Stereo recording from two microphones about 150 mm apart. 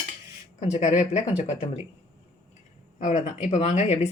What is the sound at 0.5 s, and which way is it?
Speech, 50° left (ahead or behind).